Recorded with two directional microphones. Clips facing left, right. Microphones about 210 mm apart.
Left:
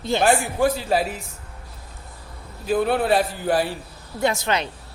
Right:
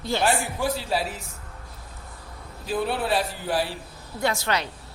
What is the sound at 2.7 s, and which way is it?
Speech, 50° left (ahead or behind).